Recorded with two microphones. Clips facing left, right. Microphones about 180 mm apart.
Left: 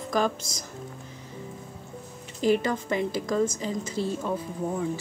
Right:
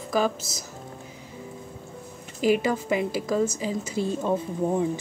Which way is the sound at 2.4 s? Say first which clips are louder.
Right 1 dB; 10° right (ahead or behind).